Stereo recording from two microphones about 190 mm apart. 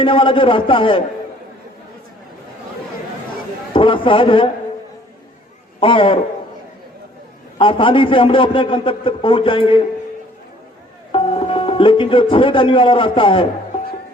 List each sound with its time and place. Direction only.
0.0 s a man's voice: 25° left (ahead or behind)
3.7 s a man's voice: 25° left (ahead or behind)
5.8 s a man's voice: 30° left (ahead or behind)
7.6 s a man's voice: 25° left (ahead or behind)
11.1 s speech: 30° left (ahead or behind)